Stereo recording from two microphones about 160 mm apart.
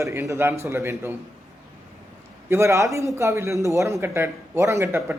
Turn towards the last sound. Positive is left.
turn(degrees=-15)  # may be behind; listen again after turning